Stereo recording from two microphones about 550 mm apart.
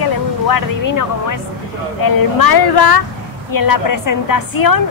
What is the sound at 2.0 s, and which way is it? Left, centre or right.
A woman's voice, left.